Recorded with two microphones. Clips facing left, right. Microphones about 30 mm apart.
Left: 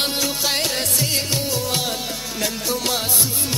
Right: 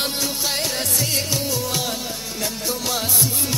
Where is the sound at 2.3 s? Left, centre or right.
Left.